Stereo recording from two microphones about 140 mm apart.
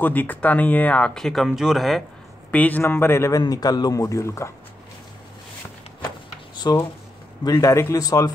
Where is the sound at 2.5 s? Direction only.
10° left (ahead or behind).